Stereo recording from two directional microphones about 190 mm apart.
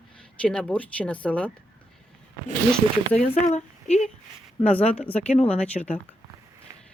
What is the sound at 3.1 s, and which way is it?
Speech, 35° left (ahead or behind).